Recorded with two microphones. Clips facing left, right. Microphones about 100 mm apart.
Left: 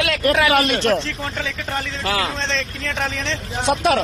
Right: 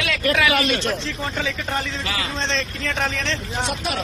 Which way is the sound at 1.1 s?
5° right (ahead or behind).